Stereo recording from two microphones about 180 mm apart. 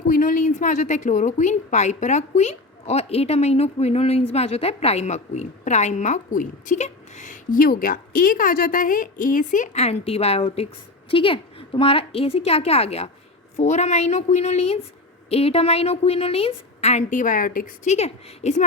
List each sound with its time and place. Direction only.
0.1 s a woman's voice: 50° left (ahead or behind)